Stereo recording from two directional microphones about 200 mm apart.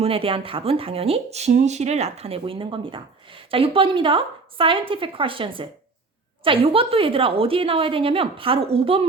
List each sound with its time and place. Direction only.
0.0 s speech: 30° right (ahead or behind)